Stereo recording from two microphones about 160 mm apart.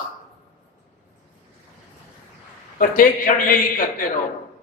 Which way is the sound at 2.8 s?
60° left (ahead or behind).